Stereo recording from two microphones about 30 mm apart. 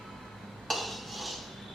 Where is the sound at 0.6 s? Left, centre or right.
Centre.